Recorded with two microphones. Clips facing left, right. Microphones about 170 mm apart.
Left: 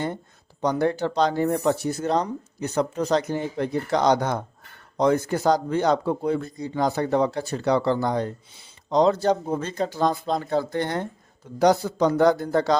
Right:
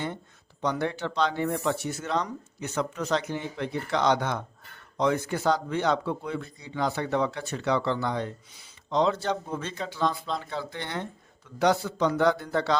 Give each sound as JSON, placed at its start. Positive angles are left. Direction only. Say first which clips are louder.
{"t": 0.6, "sound": "speech", "louder": "left 6 dB", "side_deg": 40}